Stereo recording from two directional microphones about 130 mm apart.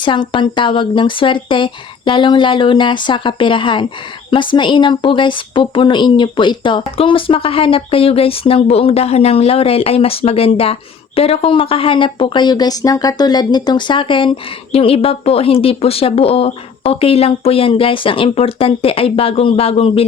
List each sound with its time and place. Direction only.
0.0 s speech: 40° left (ahead or behind)